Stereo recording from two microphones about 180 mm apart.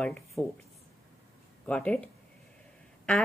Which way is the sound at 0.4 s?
15° left (ahead or behind).